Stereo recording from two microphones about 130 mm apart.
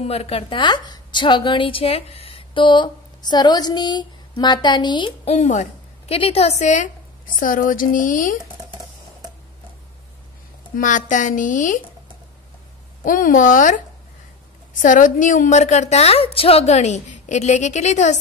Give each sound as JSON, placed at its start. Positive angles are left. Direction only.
{"t": 0.0, "sound": "a woman's voice", "side_deg": 50}
{"t": 5.2, "sound": "a sound", "side_deg": 55}
{"t": 6.1, "sound": "a woman's voice", "side_deg": 50}
{"t": 7.3, "sound": "speech", "side_deg": 90}
{"t": 10.8, "sound": "a woman's voice", "side_deg": 75}
{"t": 13.0, "sound": "a woman's voice", "side_deg": 90}